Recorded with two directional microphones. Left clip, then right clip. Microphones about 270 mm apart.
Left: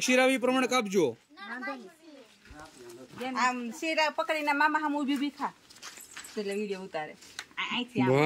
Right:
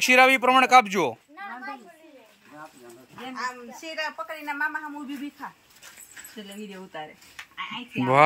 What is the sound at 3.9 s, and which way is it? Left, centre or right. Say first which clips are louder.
Speech: left 4 dB; left.